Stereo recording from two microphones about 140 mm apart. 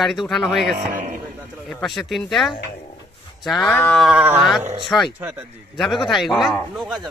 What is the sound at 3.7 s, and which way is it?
Livestock, 10° left (ahead or behind).